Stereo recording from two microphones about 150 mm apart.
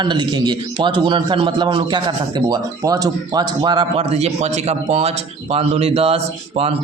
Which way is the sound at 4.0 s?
45° right (ahead or behind).